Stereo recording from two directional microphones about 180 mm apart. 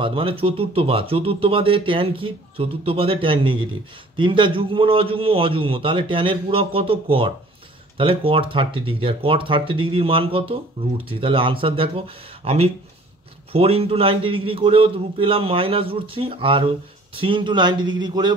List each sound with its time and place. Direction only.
0.0 s a man's voice: 30° right (ahead or behind)